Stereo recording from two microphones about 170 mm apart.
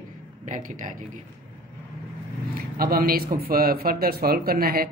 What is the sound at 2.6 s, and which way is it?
Speech, 60° right (ahead or behind).